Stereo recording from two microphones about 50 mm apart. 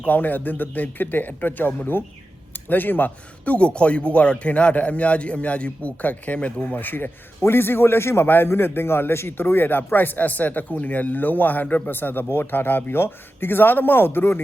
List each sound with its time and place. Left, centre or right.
0.1 s a man's voice: left
6.7 s a man's voice: left